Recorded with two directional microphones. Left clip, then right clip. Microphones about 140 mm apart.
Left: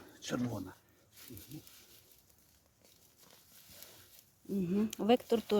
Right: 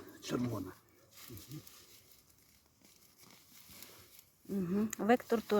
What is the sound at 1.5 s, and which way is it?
Speech, 20° left (ahead or behind).